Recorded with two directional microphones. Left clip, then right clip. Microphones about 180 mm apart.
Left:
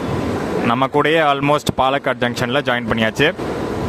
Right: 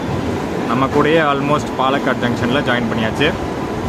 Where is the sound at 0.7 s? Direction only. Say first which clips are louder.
Right 1 dB; 55° left (ahead or behind).